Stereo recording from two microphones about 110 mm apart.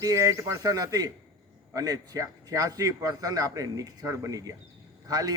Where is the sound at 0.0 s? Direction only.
30° right (ahead or behind).